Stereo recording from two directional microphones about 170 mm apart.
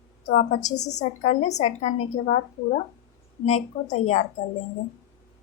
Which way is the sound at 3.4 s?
40° left (ahead or behind).